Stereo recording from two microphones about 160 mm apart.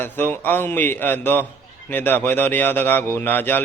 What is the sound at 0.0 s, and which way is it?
Speech, 15° left (ahead or behind).